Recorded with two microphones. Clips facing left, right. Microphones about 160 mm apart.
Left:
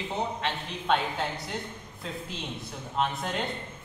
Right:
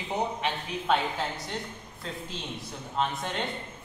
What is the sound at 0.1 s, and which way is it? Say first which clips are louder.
Speech: right 3 dB; 10° right (ahead or behind).